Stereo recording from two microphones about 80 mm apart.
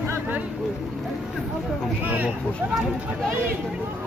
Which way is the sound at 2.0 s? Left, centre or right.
Centre.